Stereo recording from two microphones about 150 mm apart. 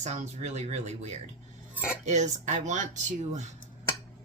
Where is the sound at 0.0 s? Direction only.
50° right (ahead or behind).